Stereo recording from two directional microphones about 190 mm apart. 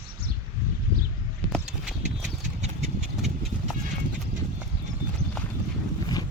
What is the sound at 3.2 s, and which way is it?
Horse, centre (ahead or behind).